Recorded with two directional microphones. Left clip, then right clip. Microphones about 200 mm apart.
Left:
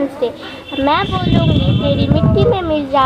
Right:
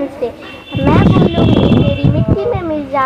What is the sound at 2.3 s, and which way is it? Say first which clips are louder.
Speech: left 5 dB; centre (ahead or behind).